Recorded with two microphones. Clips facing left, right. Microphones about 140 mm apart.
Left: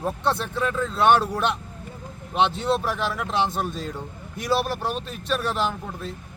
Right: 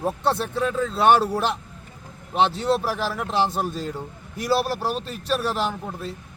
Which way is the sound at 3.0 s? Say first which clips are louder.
Even; 35° right (ahead or behind).